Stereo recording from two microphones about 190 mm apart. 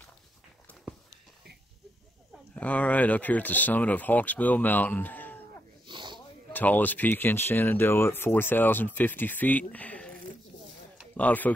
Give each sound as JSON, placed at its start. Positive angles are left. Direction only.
{"t": 2.5, "sound": "speech", "side_deg": 5}
{"t": 5.9, "sound": "snort", "side_deg": -25}
{"t": 6.1, "sound": "speech", "side_deg": 10}
{"t": 11.1, "sound": "speech", "side_deg": 10}